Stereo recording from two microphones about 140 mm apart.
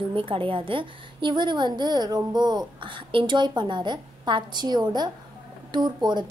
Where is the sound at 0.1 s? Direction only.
40° right (ahead or behind).